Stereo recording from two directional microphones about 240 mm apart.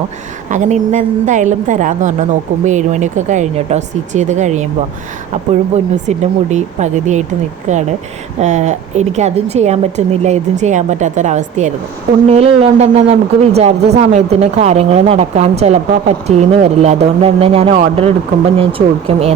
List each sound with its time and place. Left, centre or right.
0.5 s a woman's voice: right
5.7 s speech: right